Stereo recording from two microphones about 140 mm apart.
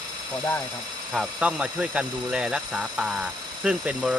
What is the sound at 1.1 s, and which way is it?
Speech, 5° right (ahead or behind).